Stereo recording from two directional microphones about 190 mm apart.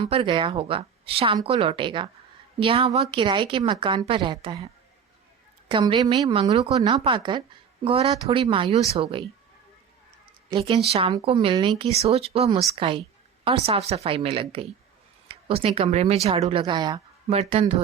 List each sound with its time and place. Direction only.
0.0 s a woman's voice: 25° right (ahead or behind)
6.5 s a woman's voice: 30° right (ahead or behind)
10.5 s a woman's voice: 30° right (ahead or behind)